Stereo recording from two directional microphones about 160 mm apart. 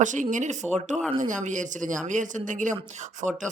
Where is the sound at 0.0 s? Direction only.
50° right (ahead or behind).